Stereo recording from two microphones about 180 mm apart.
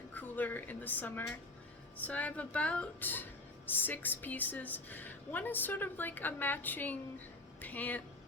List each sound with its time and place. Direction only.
0.1 s a woman's voice: 10° left (ahead or behind)